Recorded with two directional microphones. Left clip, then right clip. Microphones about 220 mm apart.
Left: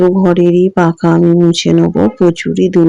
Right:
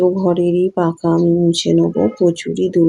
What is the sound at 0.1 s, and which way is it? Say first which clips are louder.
Speech: left 5 dB; 25° left (ahead or behind).